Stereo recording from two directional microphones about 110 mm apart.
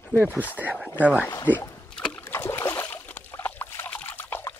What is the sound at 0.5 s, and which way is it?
Speech, 15° right (ahead or behind).